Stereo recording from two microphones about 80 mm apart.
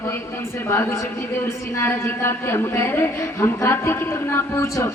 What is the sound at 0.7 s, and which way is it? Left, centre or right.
Speech, left.